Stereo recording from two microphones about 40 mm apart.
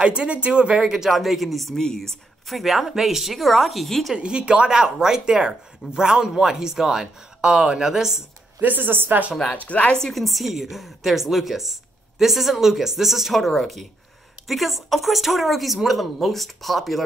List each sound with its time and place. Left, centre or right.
0.0 s speech: right
0.9 s speech: centre
1.2 s a woman's voice: centre
1.8 s speech: centre
2.5 s a woman's voice: centre
4.2 s speech: right
8.5 s a woman's voice: right
9.7 s speech: left
10.0 s a woman's voice: centre